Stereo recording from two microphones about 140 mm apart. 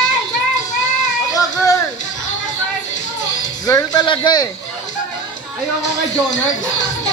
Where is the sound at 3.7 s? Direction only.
30° left (ahead or behind).